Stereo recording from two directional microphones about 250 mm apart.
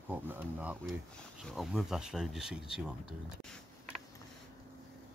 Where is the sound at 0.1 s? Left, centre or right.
Centre.